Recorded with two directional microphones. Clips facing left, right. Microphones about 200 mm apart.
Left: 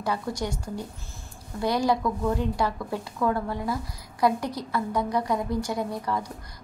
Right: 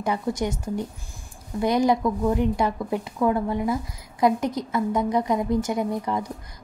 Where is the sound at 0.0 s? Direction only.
20° right (ahead or behind).